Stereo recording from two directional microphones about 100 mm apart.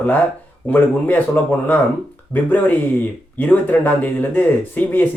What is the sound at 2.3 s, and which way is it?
Speech, 20° left (ahead or behind).